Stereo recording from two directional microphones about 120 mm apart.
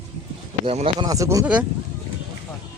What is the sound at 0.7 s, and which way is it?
Speech, 55° right (ahead or behind).